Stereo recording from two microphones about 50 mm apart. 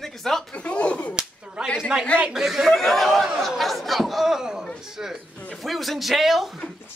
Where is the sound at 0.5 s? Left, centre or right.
Left.